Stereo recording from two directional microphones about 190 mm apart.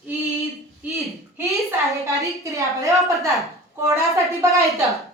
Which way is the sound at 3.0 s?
15° right (ahead or behind).